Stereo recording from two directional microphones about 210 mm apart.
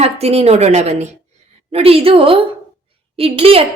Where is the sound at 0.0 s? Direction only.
30° right (ahead or behind).